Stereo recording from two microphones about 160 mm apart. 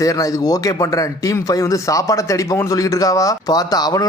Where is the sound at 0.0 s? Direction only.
20° left (ahead or behind).